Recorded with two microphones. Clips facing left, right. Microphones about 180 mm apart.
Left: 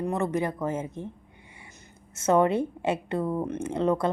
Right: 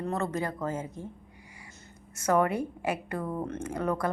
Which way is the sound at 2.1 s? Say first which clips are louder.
Left 4 dB; 25° left (ahead or behind).